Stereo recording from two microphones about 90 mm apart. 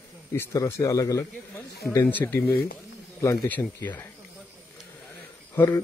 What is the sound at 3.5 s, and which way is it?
Speech, 20° left (ahead or behind).